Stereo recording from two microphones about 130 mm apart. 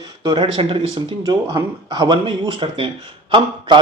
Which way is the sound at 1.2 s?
30° right (ahead or behind).